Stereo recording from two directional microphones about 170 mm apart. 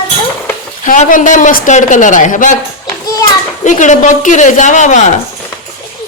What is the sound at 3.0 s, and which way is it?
Children playing, 20° left (ahead or behind).